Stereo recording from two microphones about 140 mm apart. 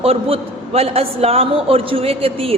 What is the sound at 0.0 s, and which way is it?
A woman's voice, 45° right (ahead or behind).